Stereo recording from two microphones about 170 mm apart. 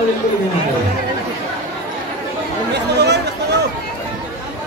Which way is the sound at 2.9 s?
80° right.